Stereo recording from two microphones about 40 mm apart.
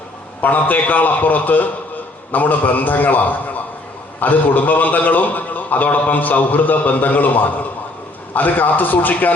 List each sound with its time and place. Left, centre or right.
0.4 s a man's voice: left